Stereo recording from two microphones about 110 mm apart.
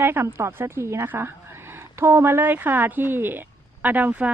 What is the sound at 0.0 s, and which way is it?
A woman's voice, 20° right (ahead or behind).